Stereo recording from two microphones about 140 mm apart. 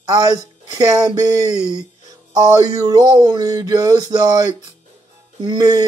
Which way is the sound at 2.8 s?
30° right (ahead or behind).